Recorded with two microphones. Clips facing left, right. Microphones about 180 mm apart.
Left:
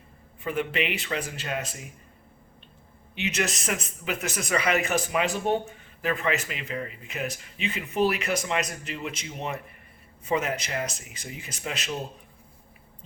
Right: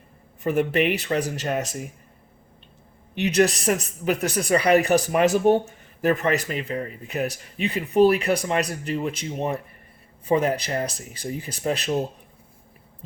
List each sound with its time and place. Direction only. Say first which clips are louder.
0.4 s speech: right 7 dB; 45° right (ahead or behind)
3.2 s speech: right 9 dB; 35° right (ahead or behind)